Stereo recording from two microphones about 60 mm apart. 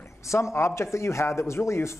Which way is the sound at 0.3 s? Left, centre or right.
Left.